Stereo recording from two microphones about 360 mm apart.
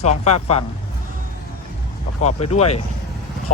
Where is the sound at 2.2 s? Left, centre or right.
Centre.